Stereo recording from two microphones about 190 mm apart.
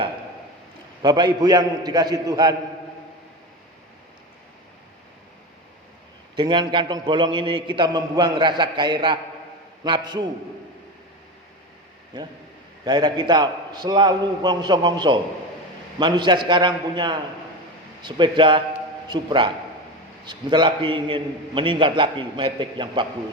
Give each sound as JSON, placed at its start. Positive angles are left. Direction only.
{"t": 1.0, "sound": "a man's voice", "side_deg": -20}
{"t": 6.3, "sound": "a man's voice", "side_deg": -25}
{"t": 12.8, "sound": "a man's voice", "side_deg": -20}